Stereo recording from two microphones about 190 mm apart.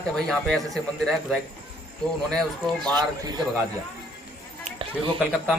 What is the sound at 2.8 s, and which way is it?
Speech, 20° right (ahead or behind).